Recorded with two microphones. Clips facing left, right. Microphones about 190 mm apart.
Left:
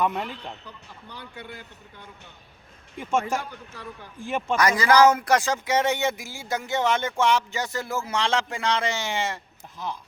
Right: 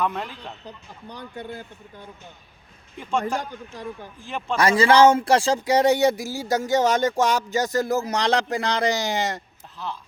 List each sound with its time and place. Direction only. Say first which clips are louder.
0.0 s speech: left 1 dB; 10° left (ahead or behind)
1.4 s speech: right 6 dB; 40° right (ahead or behind)
4.3 s speech: left 3 dB; 10° left (ahead or behind)
4.5 s speech: right 3 dB; 30° right (ahead or behind)
9.7 s speech: even; 15° left (ahead or behind)